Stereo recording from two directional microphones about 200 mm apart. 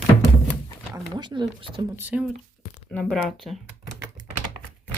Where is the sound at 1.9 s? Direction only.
10° right (ahead or behind).